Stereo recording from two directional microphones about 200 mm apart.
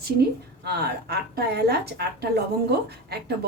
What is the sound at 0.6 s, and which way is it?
A woman's voice, 55° right (ahead or behind).